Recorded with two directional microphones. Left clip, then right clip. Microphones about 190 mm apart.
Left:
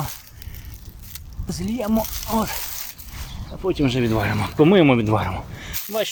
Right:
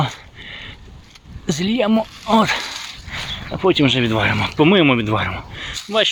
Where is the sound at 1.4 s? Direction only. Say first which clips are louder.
Right 8 dB; 15° right (ahead or behind).